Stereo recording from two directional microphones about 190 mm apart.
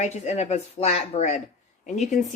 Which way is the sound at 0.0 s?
35° left (ahead or behind).